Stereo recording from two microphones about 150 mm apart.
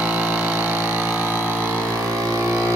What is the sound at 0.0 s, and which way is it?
Vehicle, 10° right (ahead or behind).